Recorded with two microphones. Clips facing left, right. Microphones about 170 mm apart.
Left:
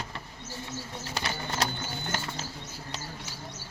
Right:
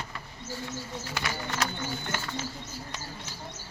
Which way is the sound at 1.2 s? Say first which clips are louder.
Left 1 dB; 30° left (ahead or behind).